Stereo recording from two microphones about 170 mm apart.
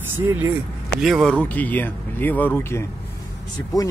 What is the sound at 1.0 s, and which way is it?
Speech, centre (ahead or behind).